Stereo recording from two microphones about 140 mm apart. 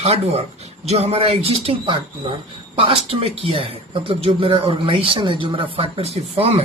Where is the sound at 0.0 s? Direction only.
45° right (ahead or behind).